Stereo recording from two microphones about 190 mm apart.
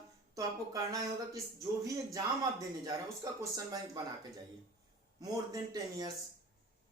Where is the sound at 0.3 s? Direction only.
15° right (ahead or behind).